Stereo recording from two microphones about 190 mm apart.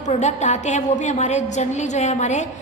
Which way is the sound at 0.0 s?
40° left (ahead or behind).